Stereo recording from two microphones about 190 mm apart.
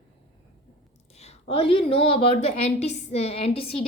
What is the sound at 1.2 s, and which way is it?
A woman's voice, 30° left (ahead or behind).